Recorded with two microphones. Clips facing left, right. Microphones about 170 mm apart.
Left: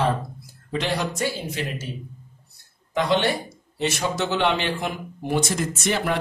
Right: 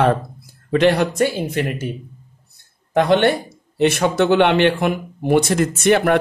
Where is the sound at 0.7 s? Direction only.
60° right (ahead or behind).